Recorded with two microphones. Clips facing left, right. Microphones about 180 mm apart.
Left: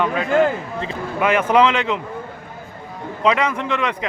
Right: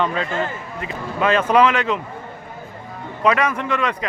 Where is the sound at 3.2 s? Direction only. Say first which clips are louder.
Even; 20° left (ahead or behind).